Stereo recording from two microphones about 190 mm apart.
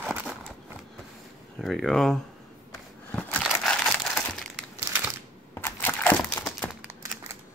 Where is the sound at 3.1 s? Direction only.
5° left (ahead or behind).